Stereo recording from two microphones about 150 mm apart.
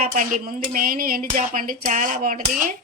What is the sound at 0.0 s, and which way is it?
Speech, 60° right (ahead or behind).